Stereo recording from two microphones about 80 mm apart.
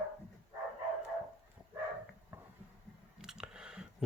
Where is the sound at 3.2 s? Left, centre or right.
Centre.